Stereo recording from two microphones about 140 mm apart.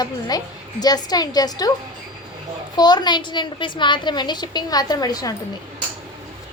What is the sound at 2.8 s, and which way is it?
A woman's voice, 30° left (ahead or behind).